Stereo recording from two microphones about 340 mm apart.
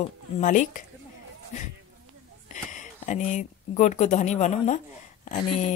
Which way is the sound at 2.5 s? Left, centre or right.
Left.